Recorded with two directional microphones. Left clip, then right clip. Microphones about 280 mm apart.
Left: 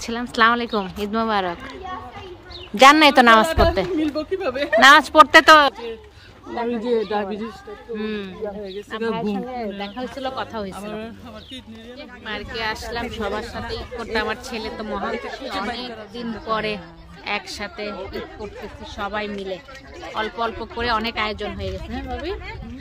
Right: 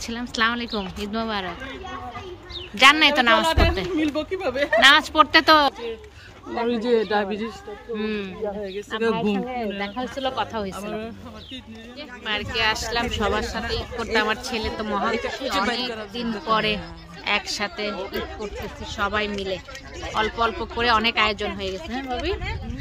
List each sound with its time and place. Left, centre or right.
0.0 s speech: centre
2.8 s a woman's voice: centre
4.1 s speech: centre
4.7 s speech: centre
10.7 s a woman's voice: left
12.3 s speech: centre
15.1 s speech: right
16.4 s speech: centre
18.9 s speech: centre